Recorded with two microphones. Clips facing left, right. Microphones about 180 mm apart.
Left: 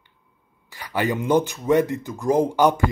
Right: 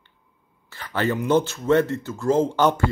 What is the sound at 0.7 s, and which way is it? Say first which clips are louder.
Speech: even; 15° left (ahead or behind).